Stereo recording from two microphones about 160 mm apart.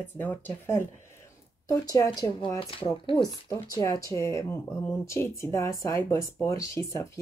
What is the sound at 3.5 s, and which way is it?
Speech, 20° left (ahead or behind).